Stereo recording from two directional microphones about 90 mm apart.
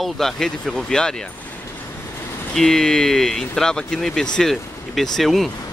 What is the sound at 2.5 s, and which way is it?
Speech, 5° left (ahead or behind).